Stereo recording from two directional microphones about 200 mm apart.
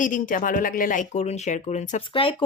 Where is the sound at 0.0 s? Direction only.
40° left (ahead or behind).